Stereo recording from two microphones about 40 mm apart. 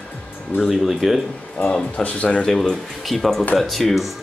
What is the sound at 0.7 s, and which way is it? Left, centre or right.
Speech, centre.